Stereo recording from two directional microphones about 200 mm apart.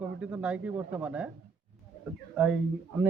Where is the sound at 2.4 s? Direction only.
5° right (ahead or behind).